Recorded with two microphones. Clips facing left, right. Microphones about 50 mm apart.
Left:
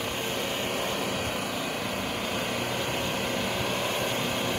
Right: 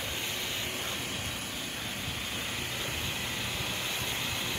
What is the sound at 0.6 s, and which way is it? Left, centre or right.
Vehicle, left.